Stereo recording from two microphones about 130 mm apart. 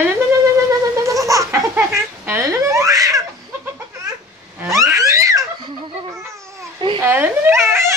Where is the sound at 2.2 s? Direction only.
20° right (ahead or behind).